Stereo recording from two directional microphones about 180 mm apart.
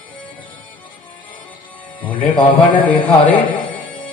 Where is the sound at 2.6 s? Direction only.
50° left (ahead or behind).